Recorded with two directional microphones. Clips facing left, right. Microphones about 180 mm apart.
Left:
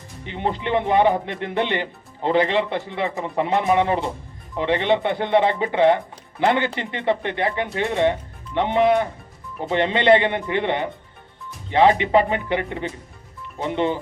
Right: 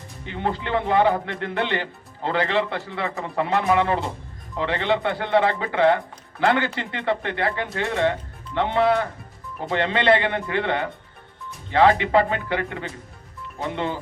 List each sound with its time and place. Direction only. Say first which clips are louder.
0.3 s speech: left 2 dB; 20° left (ahead or behind)